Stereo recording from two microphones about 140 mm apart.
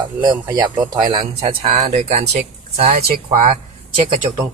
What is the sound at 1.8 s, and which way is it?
Speech, 60° right (ahead or behind).